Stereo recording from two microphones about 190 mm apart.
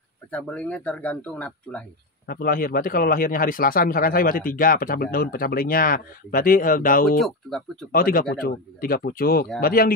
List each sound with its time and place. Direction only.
0.3 s speech: 5° left (ahead or behind)
2.2 s a man's voice: 50° left (ahead or behind)
7.2 s speech: centre (ahead or behind)
7.9 s a man's voice: 50° left (ahead or behind)